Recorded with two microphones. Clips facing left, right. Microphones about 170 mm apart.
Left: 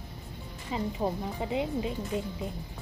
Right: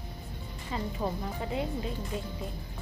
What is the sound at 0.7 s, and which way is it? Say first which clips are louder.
Speech: left 3 dB; 15° left (ahead or behind).